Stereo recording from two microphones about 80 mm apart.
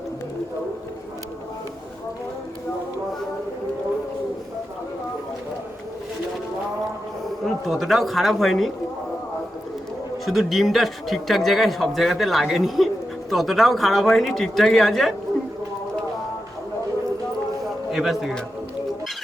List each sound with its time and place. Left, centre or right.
7.4 s a man's voice: centre
10.2 s a man's voice: centre
17.9 s a man's voice: centre